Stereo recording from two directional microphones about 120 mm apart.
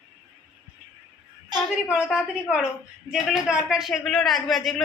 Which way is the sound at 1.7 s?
5° right (ahead or behind).